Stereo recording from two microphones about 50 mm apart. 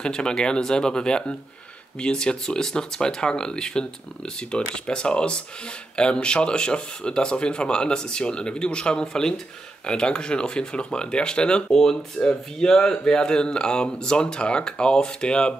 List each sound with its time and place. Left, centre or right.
0.0 s speech: centre